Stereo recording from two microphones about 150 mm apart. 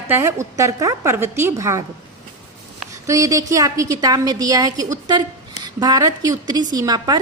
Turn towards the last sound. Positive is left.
turn(degrees=-25)  # may be behind; listen again after turning